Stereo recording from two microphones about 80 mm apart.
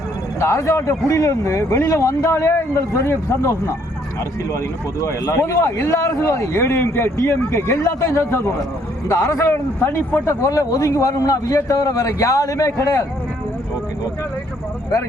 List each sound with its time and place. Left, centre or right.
0.3 s speech: left
10.4 s a man's voice: left